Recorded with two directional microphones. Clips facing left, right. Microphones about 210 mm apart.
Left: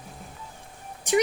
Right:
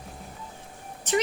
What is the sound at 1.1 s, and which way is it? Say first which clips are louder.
Speech: left 3 dB; 10° left (ahead or behind).